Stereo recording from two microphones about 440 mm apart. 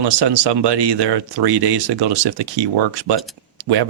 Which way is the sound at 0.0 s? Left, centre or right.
Right.